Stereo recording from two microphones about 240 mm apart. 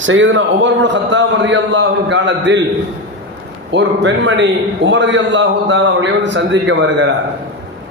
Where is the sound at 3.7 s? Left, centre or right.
Right.